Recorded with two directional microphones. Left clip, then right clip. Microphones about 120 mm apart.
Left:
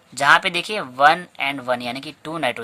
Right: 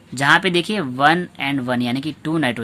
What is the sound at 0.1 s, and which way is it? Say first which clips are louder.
Speech: even; 40° left (ahead or behind).